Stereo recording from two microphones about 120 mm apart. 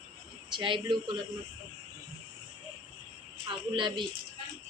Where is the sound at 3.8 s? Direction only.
40° right (ahead or behind).